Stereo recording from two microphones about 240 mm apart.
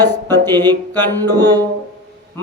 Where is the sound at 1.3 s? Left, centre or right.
Centre.